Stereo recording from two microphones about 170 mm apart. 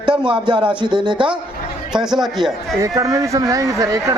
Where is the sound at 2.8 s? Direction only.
20° right (ahead or behind).